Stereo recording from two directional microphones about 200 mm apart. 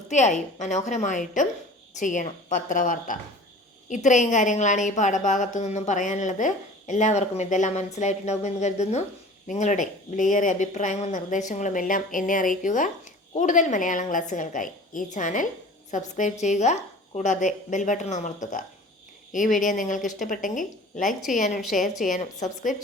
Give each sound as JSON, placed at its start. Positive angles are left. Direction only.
{"t": 0.1, "sound": "a woman's voice", "side_deg": 35}